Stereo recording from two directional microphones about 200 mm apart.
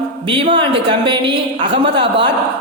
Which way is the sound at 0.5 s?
25° right (ahead or behind).